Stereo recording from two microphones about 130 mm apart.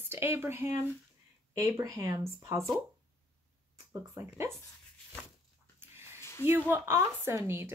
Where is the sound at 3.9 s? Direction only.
20° right (ahead or behind).